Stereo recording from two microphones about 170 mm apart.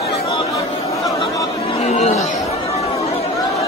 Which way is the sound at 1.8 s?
40° left (ahead or behind).